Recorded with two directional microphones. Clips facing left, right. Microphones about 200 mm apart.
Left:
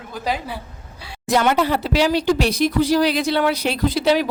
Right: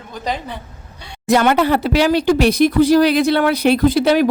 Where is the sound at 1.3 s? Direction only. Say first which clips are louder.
Right 4 dB; 60° right (ahead or behind).